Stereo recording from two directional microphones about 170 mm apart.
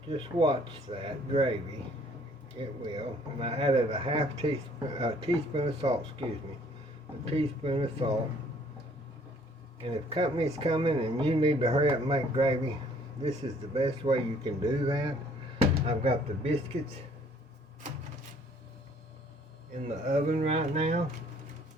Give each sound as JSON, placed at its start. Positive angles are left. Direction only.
{"t": 0.1, "sound": "speech", "side_deg": -30}
{"t": 2.6, "sound": "speech", "side_deg": -30}
{"t": 7.3, "sound": "speech", "side_deg": -35}
{"t": 9.8, "sound": "speech", "side_deg": -30}
{"t": 13.7, "sound": "speech", "side_deg": -30}
{"t": 19.7, "sound": "speech", "side_deg": -40}